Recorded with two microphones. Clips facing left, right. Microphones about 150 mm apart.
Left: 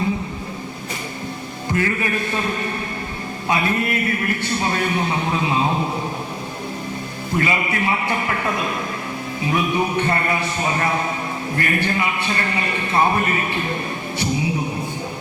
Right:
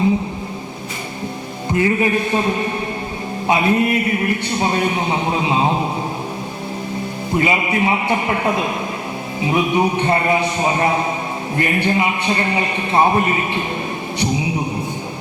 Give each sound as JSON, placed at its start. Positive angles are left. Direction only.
{"t": 1.7, "sound": "a man's voice", "side_deg": -20}
{"t": 3.4, "sound": "a man's voice", "side_deg": -20}
{"t": 7.3, "sound": "a man's voice", "side_deg": -20}